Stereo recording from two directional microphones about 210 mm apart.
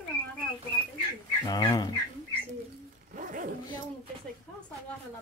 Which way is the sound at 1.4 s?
20° left (ahead or behind).